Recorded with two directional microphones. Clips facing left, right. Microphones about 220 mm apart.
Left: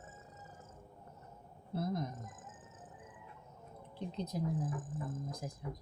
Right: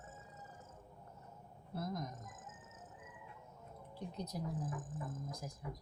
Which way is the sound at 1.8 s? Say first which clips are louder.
Left 5 dB; 30° left (ahead or behind).